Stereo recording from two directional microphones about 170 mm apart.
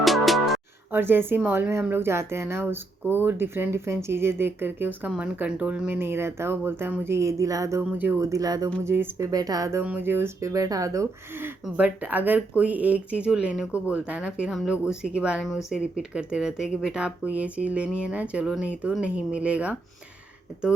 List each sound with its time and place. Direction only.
0.0 s music: centre (ahead or behind)
0.9 s speech: 10° right (ahead or behind)